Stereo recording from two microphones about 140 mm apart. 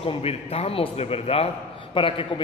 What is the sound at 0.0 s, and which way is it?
A man's voice, 45° left (ahead or behind).